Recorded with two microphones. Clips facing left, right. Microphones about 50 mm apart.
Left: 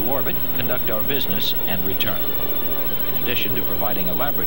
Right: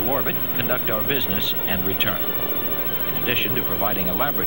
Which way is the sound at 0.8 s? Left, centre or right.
Centre.